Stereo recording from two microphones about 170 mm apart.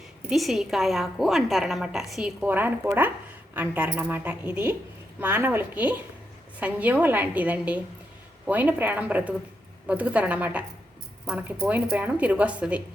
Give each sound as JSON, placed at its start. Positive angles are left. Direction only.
{"t": 0.3, "sound": "a woman's voice", "side_deg": 0}